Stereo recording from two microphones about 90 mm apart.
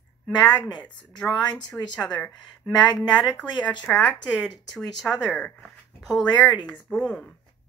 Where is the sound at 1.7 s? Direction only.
15° left (ahead or behind).